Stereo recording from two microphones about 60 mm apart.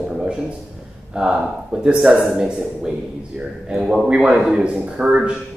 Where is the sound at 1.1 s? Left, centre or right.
Centre.